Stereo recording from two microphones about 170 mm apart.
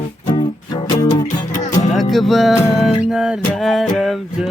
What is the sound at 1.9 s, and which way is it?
Music, centre (ahead or behind).